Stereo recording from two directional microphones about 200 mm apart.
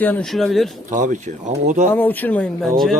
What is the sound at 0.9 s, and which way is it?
Speech, 40° right (ahead or behind).